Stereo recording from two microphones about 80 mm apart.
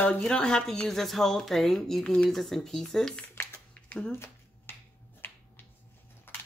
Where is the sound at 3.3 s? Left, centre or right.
Left.